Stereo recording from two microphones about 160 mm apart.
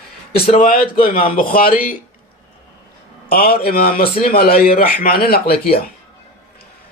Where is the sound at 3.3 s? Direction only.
65° left (ahead or behind).